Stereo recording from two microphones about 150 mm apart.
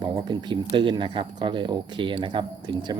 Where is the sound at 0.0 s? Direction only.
30° right (ahead or behind).